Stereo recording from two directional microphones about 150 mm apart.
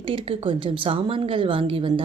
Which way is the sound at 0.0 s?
35° right (ahead or behind).